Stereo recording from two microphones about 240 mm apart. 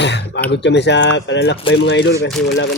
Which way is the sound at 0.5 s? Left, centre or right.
Left.